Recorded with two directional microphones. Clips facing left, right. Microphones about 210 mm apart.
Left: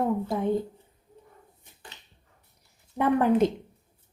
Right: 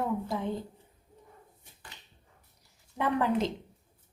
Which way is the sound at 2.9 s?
50° left (ahead or behind).